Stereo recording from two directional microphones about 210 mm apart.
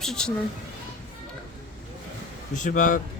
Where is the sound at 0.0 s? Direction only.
5° left (ahead or behind).